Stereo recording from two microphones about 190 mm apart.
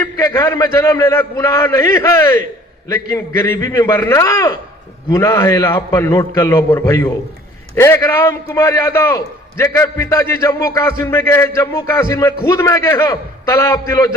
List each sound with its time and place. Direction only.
0.0 s a man's voice: 15° left (ahead or behind)